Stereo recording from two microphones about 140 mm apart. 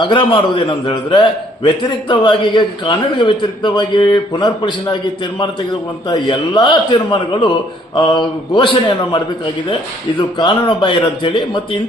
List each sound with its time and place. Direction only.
0.0 s a man's voice: 35° left (ahead or behind)
6.1 s a man's voice: 35° left (ahead or behind)
10.2 s a man's voice: 35° left (ahead or behind)